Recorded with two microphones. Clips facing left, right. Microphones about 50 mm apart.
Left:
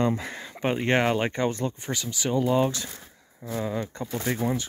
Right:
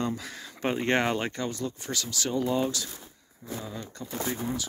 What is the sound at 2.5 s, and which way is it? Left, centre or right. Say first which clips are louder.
Speech: left 4 dB; left.